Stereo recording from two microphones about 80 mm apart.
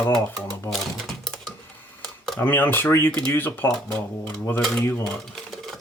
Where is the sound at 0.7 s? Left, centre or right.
Centre.